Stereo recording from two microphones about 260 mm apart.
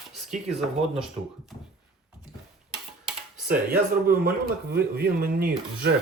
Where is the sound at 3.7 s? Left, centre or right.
Right.